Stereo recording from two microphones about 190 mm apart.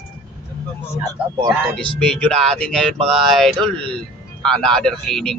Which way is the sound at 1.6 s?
Centre (ahead or behind).